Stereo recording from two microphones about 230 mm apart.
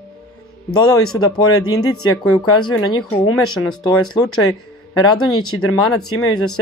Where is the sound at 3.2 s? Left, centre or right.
Left.